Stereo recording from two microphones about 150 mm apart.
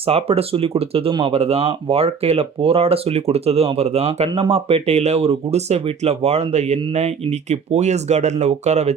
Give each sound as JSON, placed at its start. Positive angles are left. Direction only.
{"t": 0.0, "sound": "speech", "side_deg": -40}